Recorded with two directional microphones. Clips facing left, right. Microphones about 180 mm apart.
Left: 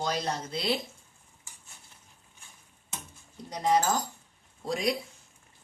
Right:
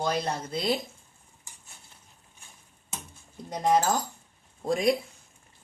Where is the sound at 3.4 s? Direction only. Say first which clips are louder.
Right 2 dB; 50° right (ahead or behind).